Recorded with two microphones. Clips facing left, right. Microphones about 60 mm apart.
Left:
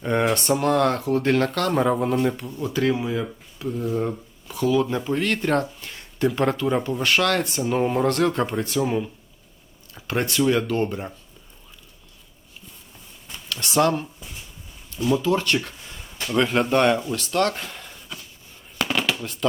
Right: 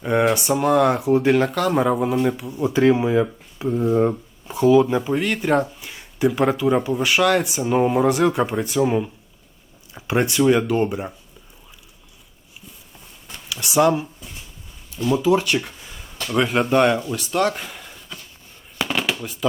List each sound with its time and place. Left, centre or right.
0.0 s speech: centre
2.6 s speech: right
13.5 s speech: centre
18.8 s a sound: centre